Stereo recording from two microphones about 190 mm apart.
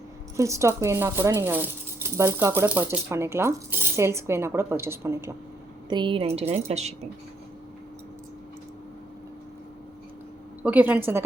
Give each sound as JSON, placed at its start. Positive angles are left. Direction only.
{"t": 0.3, "sound": "speech", "side_deg": -15}
{"t": 5.9, "sound": "a woman's voice", "side_deg": -25}
{"t": 10.6, "sound": "speech", "side_deg": -10}